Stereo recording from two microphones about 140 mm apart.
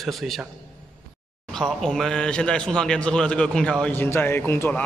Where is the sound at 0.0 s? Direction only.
Centre (ahead or behind).